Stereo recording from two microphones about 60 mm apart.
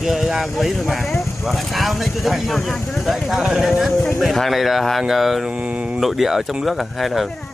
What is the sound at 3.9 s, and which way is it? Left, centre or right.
Speech, left.